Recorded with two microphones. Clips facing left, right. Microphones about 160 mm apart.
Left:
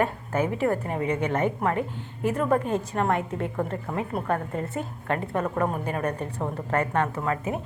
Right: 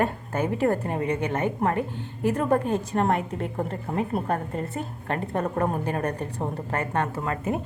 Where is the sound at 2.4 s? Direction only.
35° right (ahead or behind).